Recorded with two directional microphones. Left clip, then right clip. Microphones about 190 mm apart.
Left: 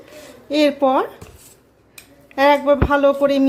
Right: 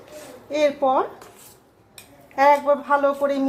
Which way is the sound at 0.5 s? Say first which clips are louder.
Left 3 dB; 35° left (ahead or behind).